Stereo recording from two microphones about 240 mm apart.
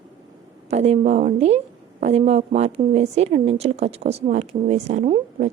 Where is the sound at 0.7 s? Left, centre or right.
Right.